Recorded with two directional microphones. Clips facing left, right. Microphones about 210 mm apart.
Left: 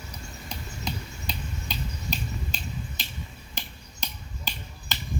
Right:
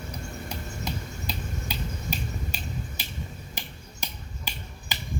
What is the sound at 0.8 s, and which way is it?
Finger snapping, 5° right (ahead or behind).